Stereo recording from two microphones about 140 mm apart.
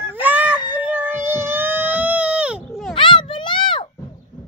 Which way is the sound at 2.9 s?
35° left (ahead or behind).